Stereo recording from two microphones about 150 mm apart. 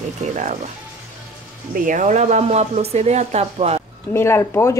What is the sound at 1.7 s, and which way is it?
Speech, 60° right (ahead or behind).